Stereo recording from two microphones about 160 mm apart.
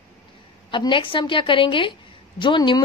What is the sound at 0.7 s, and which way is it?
Speech, 30° left (ahead or behind).